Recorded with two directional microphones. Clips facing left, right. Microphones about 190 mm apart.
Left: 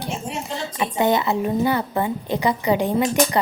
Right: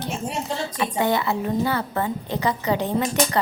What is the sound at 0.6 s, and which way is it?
A woman's voice, 20° left (ahead or behind).